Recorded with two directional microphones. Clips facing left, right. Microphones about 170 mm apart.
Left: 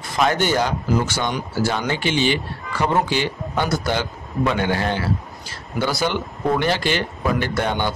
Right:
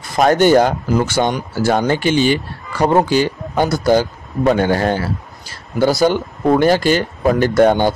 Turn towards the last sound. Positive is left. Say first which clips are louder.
# right 10 dB
turn(degrees=-45)  # may be behind; listen again after turning